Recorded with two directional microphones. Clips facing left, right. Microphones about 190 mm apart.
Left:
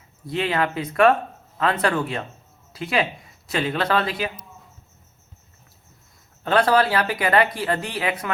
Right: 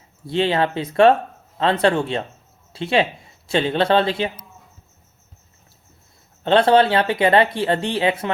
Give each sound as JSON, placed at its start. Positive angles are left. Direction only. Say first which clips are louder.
{"t": 0.3, "sound": "speech", "louder": "right 4 dB", "side_deg": -30}
{"t": 6.4, "sound": "speech", "louder": "right 4 dB", "side_deg": -25}